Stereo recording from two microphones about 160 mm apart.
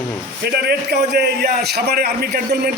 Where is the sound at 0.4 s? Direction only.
85° right.